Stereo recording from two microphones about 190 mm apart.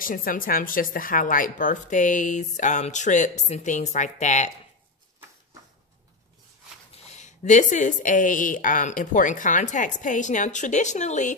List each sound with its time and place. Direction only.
0.0 s a woman's voice: 45° left (ahead or behind)
6.9 s a woman's voice: 35° left (ahead or behind)